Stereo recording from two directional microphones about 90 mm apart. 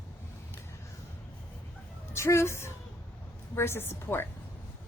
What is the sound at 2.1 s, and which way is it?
A woman's voice, 30° left (ahead or behind).